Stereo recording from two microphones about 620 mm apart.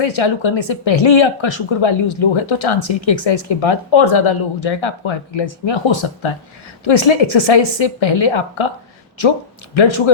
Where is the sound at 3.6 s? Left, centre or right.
Left.